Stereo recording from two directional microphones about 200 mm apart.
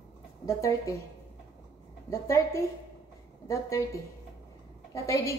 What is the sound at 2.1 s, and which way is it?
A woman's voice, 15° left (ahead or behind).